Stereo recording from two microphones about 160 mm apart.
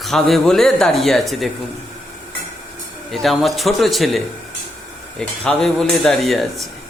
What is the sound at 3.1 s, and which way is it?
Speech, centre (ahead or behind).